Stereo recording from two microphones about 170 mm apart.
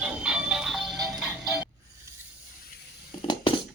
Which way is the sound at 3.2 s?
35° left (ahead or behind).